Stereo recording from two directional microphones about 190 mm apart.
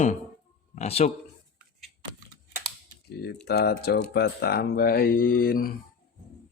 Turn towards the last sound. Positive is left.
turn(degrees=50)  # may be behind; listen again after turning